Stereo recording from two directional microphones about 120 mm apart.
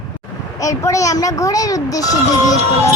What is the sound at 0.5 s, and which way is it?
Speech, 25° left (ahead or behind).